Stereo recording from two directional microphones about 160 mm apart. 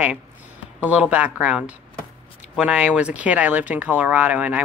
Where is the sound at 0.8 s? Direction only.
10° right (ahead or behind).